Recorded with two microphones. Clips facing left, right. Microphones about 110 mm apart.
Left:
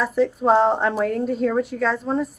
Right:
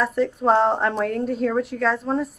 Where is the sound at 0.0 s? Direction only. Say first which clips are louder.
Left 1 dB; centre (ahead or behind).